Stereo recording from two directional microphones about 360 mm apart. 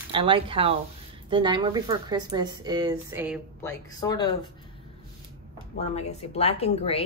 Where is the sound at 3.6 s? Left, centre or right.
Centre.